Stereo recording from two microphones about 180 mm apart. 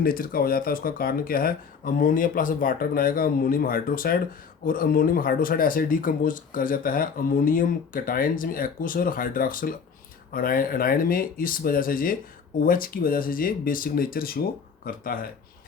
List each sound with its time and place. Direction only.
0.0 s speech: 55° left (ahead or behind)